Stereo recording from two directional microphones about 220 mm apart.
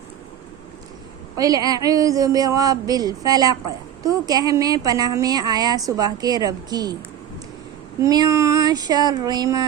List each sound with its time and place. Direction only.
1.4 s speech: 15° right (ahead or behind)
8.0 s speech: 15° right (ahead or behind)